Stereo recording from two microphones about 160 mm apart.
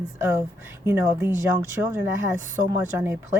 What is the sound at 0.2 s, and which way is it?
Speech, 15° right (ahead or behind).